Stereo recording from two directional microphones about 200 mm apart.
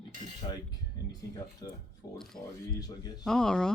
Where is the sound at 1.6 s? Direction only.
20° left (ahead or behind).